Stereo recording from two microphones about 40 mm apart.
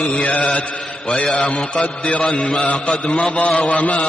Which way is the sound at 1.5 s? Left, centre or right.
Left.